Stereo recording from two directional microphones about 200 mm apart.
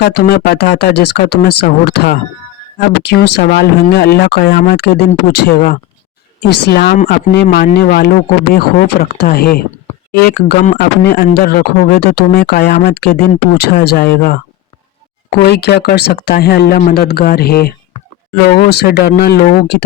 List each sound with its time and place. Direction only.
0.0 s speech: 55° left (ahead or behind)